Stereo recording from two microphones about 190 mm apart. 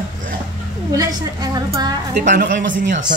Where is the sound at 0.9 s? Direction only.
20° right (ahead or behind).